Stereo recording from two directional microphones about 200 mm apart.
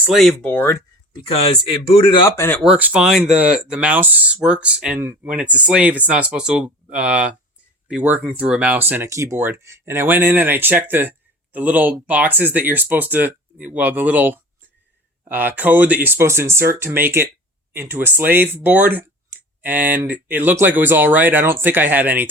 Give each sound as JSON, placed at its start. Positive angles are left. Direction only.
{"t": 0.0, "sound": "speech", "side_deg": 0}
{"t": 1.3, "sound": "speech", "side_deg": 30}
{"t": 2.2, "sound": "speech", "side_deg": 15}
{"t": 2.7, "sound": "speech", "side_deg": -5}